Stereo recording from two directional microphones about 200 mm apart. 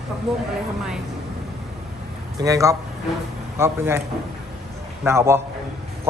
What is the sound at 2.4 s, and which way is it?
Speech, 15° right (ahead or behind).